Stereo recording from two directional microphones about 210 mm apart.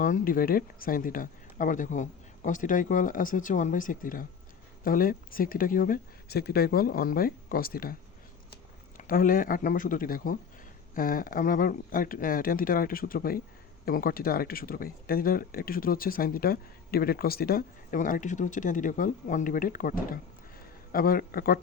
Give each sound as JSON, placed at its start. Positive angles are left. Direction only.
{"t": 0.0, "sound": "speech", "side_deg": 40}
{"t": 9.0, "sound": "speech", "side_deg": 40}